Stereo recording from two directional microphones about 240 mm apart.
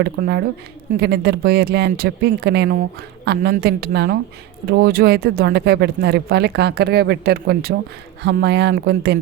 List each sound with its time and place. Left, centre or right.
0.0 s speech: right